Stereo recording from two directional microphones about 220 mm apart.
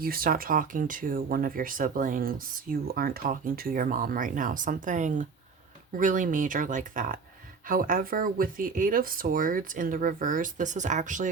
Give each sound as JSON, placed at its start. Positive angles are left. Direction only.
{"t": 0.0, "sound": "speech", "side_deg": -40}